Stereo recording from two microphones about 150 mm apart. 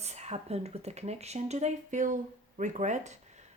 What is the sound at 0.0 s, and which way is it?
A woman's voice, 45° right (ahead or behind).